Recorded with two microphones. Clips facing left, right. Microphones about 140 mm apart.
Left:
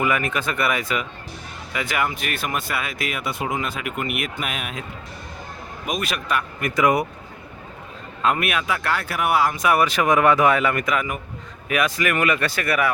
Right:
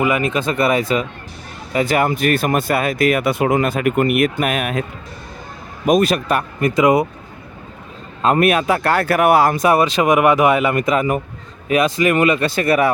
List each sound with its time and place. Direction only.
0.0 s speech: 20° right (ahead or behind); by 4.9 s 60° right (ahead or behind)
5.8 s a man's voice: 40° right (ahead or behind)
6.6 s speech: 25° right (ahead or behind)
8.2 s speech: 35° right (ahead or behind)
9.6 s speech: 25° right (ahead or behind)